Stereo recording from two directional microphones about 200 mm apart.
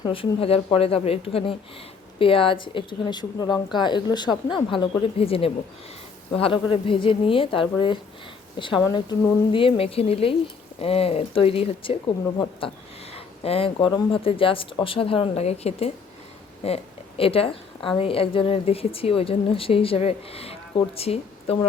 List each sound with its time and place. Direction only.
0.0 s a woman's voice: 25° left (ahead or behind)